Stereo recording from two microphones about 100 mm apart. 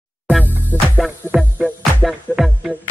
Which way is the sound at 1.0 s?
5° right (ahead or behind).